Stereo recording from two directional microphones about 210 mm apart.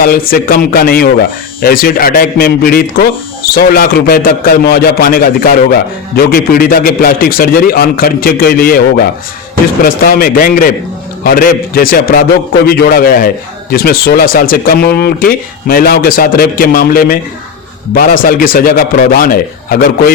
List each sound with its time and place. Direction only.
0.0 s speech: 45° left (ahead or behind)